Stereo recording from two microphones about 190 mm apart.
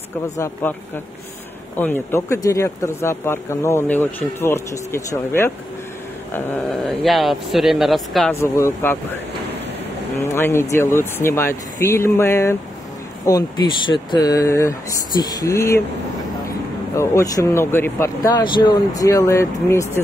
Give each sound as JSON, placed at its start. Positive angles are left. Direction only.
{"t": 0.4, "sound": "speech", "side_deg": 10}
{"t": 1.8, "sound": "speech", "side_deg": 10}
{"t": 6.3, "sound": "speech", "side_deg": 0}
{"t": 8.3, "sound": "speech", "side_deg": 15}
{"t": 10.2, "sound": "speech", "side_deg": 15}
{"t": 16.9, "sound": "speech", "side_deg": 15}